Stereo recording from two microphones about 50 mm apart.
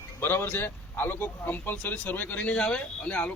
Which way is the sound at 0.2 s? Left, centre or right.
Left.